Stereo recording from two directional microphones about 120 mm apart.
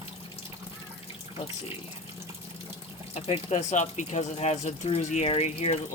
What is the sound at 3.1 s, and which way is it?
Speech, 60° left (ahead or behind).